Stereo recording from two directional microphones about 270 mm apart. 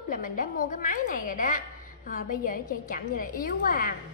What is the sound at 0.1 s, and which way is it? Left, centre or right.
A woman's voice, left.